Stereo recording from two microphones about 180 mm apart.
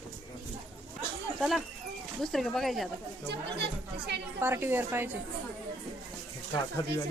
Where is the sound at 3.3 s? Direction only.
65° right (ahead or behind).